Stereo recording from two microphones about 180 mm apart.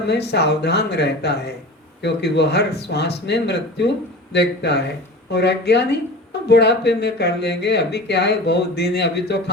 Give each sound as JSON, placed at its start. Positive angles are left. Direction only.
{"t": 0.1, "sound": "speech", "side_deg": 70}